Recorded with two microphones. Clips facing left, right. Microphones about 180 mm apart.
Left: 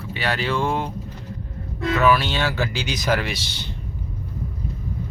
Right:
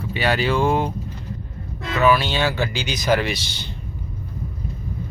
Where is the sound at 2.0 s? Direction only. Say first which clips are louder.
Right 2 dB; centre (ahead or behind).